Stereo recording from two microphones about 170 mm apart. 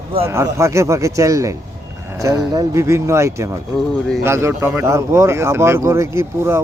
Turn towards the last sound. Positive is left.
turn(degrees=-15)  # may be behind; listen again after turning